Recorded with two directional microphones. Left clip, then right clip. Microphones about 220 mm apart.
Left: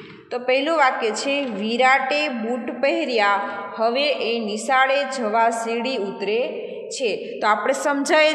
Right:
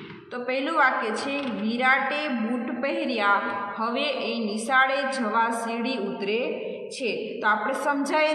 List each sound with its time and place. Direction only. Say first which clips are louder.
0.5 s a woman's voice: left 4 dB; 30° left (ahead or behind)